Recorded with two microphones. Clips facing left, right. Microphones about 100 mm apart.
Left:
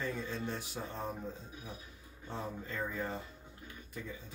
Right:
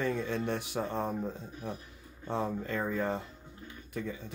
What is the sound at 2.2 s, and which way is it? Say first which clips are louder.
Speech: right 8 dB; 70° right (ahead or behind).